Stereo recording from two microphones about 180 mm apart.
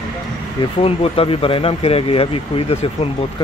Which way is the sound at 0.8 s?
30° left (ahead or behind).